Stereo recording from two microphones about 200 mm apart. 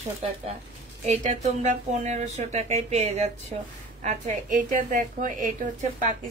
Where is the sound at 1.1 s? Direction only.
40° right (ahead or behind).